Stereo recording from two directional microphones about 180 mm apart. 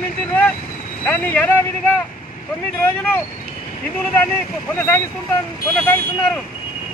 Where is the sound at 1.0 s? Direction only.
10° left (ahead or behind).